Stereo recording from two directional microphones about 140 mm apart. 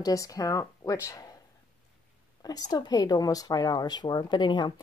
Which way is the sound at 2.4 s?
25° left (ahead or behind).